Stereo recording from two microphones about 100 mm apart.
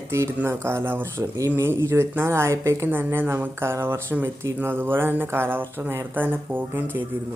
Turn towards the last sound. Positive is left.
turn(degrees=-20)  # may be behind; listen again after turning